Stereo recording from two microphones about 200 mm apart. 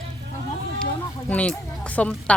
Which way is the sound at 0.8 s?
5° left (ahead or behind).